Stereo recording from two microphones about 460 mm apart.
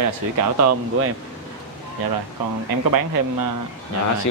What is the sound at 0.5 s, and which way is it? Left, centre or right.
Speech, right.